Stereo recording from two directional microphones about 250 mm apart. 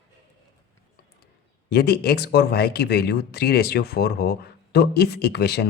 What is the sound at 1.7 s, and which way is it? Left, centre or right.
Speech, left.